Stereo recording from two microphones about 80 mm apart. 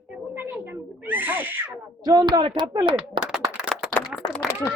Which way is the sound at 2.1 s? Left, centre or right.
Right.